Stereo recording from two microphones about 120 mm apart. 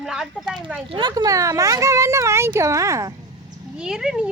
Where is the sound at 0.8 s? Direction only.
45° right (ahead or behind).